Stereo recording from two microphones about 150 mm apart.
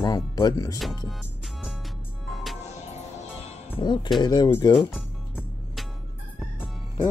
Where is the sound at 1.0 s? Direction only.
Centre (ahead or behind).